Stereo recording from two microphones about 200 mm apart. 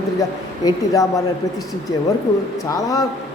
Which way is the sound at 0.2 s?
15° left (ahead or behind).